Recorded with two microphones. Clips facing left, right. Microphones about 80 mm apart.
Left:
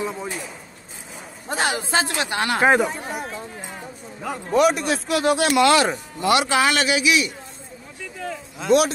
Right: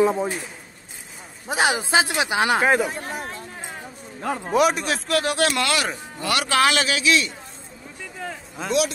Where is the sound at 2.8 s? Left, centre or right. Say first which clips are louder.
Left 2 dB; centre.